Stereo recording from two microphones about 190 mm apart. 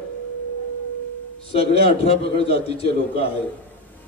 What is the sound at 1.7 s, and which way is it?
Speech, 30° left (ahead or behind).